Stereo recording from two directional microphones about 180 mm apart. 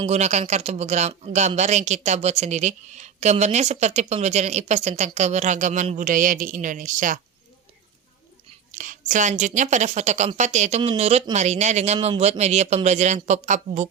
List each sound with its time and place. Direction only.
0.0 s speech: 35° right (ahead or behind)
8.8 s speech: 45° right (ahead or behind)